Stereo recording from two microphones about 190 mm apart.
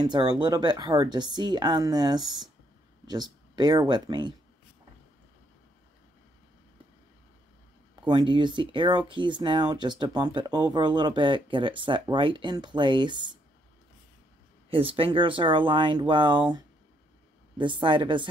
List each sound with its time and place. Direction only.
0.0 s speech: 25° right (ahead or behind)
3.5 s speech: 20° right (ahead or behind)
8.0 s speech: 25° right (ahead or behind)
14.7 s speech: 30° right (ahead or behind)